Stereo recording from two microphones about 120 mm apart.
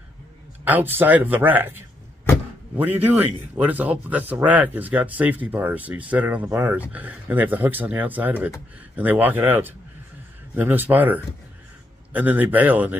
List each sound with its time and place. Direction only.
0.7 s speech: 15° right (ahead or behind)